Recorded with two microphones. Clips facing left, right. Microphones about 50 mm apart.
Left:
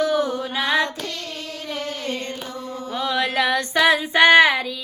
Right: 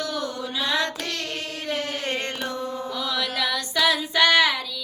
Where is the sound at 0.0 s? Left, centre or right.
Centre.